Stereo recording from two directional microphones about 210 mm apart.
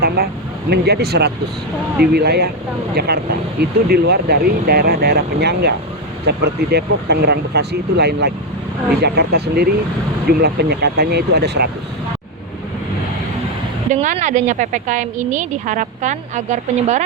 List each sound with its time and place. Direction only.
0.2 s speech: 45° right (ahead or behind)
3.6 s speech: 50° right (ahead or behind)
14.0 s a woman's voice: 35° right (ahead or behind)